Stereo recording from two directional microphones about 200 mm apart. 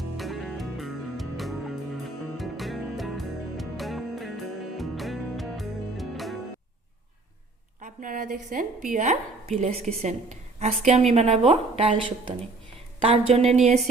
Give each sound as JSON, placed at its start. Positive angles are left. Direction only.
{"t": 0.2, "sound": "music", "side_deg": 0}
{"t": 7.8, "sound": "speech", "side_deg": -40}